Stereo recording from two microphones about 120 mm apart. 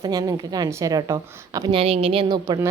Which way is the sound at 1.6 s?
50° right (ahead or behind).